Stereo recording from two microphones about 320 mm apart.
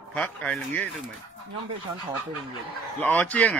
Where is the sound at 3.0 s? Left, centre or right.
Centre.